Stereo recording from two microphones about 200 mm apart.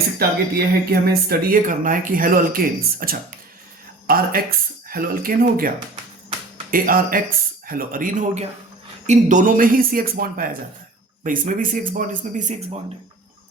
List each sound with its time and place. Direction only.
0.2 s speech: 50° right (ahead or behind); by 12.8 s 35° right (ahead or behind)